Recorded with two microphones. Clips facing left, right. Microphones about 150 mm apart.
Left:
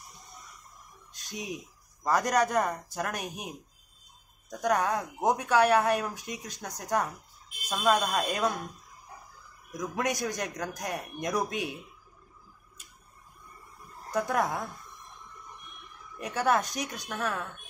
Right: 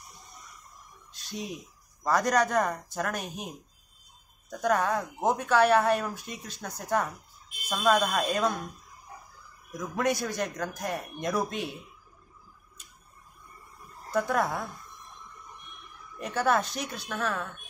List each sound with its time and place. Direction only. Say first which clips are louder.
1.2 s a sound: right 2 dB; 15° left (ahead or behind)
2.0 s speech: right 1 dB; 10° left (ahead or behind)
9.8 s speech: right 2 dB; 15° left (ahead or behind)
14.1 s speech: right 1 dB; 15° left (ahead or behind)
16.2 s speech: right 1 dB; 15° left (ahead or behind)